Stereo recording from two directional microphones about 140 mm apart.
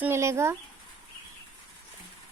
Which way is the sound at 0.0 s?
20° right (ahead or behind).